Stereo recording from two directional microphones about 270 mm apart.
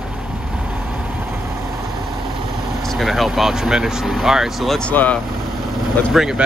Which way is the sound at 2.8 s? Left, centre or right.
Centre.